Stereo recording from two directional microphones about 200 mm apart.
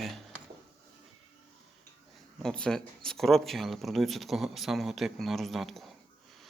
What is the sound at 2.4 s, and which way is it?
Speech, 5° left (ahead or behind).